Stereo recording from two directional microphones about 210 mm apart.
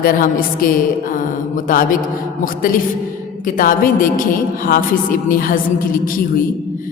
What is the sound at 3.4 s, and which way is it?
A woman's voice, 40° left (ahead or behind).